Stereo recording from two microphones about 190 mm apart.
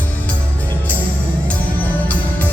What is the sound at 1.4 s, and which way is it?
Music, 10° left (ahead or behind).